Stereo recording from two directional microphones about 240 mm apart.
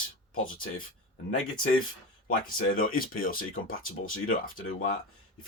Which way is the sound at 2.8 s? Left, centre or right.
Left.